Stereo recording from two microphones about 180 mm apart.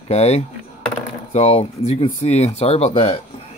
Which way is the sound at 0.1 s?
35° left (ahead or behind).